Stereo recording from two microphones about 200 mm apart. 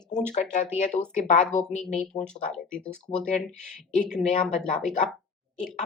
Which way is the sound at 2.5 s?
5° left (ahead or behind).